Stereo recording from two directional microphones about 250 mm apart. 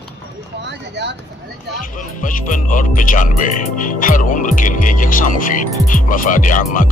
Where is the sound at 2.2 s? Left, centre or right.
Left.